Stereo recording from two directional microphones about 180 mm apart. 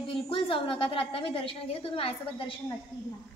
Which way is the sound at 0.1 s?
30° left (ahead or behind).